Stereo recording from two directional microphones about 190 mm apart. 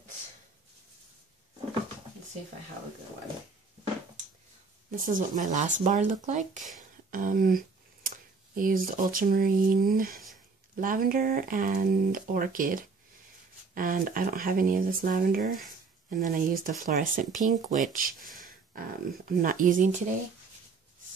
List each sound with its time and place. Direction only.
4.9 s speech: 45° right (ahead or behind)
7.1 s a sound: 45° right (ahead or behind)
8.5 s speech: 50° right (ahead or behind)